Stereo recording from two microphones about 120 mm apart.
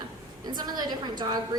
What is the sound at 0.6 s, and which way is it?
Speech, 35° right (ahead or behind).